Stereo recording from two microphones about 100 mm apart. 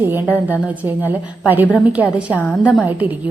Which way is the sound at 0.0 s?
20° right (ahead or behind).